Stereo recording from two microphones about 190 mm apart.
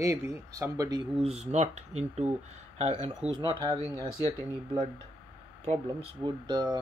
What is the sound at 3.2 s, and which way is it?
Speech, 5° right (ahead or behind).